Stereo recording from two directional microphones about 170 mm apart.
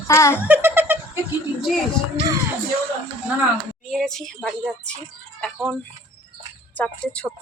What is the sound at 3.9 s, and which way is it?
Speech, centre (ahead or behind).